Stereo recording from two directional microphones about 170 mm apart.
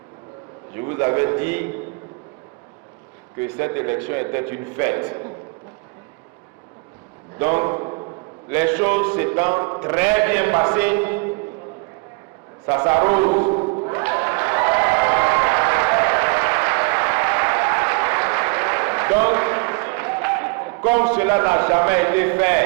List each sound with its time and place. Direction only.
0.7 s a man's voice: 10° right (ahead or behind)
3.3 s a man's voice: 10° right (ahead or behind)
7.3 s a sound: 10° right (ahead or behind)
8.4 s a man's voice: 10° right (ahead or behind)
12.6 s a man's voice: 15° right (ahead or behind)
13.9 s applause: 10° right (ahead or behind)